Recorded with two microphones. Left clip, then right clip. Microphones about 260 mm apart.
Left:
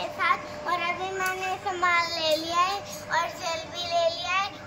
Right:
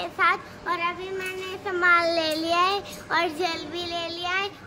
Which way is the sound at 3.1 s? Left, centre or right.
Right.